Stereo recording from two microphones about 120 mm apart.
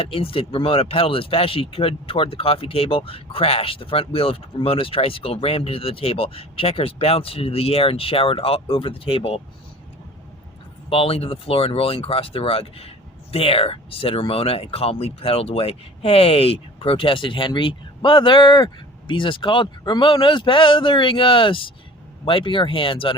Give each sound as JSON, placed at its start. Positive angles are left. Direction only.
{"t": 0.0, "sound": "speech", "side_deg": 50}
{"t": 10.8, "sound": "speech", "side_deg": 50}